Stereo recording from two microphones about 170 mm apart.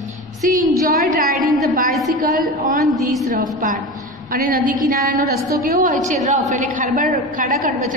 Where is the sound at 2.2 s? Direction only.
55° right (ahead or behind).